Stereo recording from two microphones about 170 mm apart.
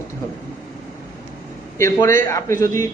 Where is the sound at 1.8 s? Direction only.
15° left (ahead or behind).